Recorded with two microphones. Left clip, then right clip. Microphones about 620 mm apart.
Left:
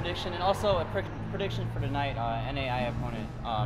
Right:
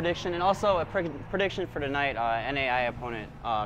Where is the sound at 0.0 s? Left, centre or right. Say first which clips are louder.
Right 3 dB; right.